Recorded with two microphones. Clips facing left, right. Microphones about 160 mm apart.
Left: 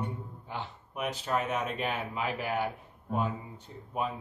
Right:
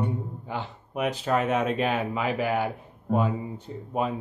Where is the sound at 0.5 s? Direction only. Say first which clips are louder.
Right 6 dB; 85° right.